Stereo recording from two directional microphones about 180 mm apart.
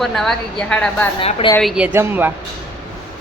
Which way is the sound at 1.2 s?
30° left (ahead or behind).